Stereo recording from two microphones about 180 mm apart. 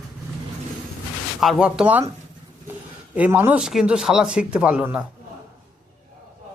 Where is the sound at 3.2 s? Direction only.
10° right (ahead or behind).